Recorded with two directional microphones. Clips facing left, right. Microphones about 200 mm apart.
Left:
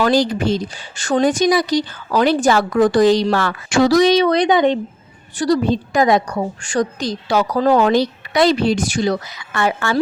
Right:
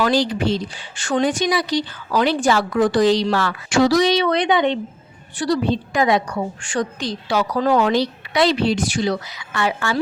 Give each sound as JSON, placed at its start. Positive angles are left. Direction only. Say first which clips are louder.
{"t": 0.0, "sound": "speech", "louder": "left 3 dB", "side_deg": 45}